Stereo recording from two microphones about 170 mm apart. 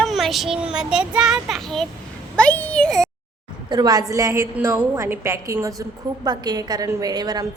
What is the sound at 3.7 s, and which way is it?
A woman's voice, 25° right (ahead or behind).